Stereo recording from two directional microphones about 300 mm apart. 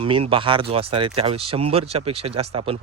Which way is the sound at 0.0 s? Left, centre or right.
Centre.